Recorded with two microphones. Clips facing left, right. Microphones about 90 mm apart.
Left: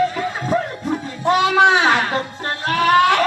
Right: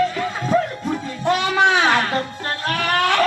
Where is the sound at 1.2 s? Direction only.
15° left (ahead or behind).